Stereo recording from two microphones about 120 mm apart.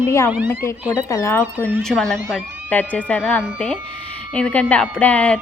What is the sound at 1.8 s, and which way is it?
Speech, 5° left (ahead or behind).